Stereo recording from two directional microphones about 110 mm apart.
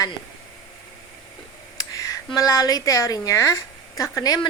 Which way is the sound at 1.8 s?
30° left (ahead or behind).